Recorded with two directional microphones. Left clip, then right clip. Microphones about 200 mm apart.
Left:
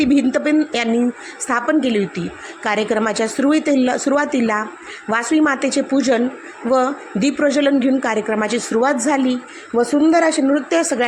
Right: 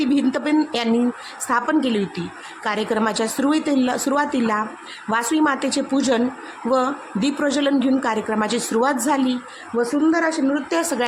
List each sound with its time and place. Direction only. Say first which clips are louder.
0.0 s a woman's voice: left 4 dB; 10° left (ahead or behind)